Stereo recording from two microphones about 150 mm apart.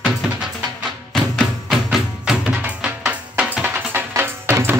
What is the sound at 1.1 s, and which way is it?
Music, centre (ahead or behind).